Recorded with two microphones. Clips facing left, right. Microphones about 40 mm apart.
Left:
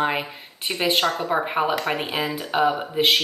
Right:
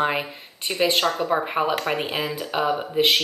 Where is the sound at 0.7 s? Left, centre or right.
Centre.